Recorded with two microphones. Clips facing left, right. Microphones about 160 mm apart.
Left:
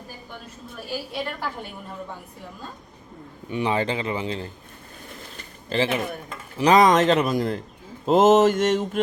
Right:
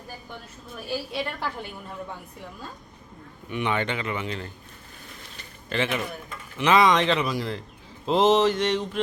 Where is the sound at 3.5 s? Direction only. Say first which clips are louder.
Left 3 dB; 30° left (ahead or behind).